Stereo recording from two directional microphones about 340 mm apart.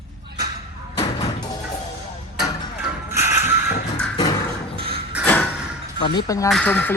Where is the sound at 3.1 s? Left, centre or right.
Centre.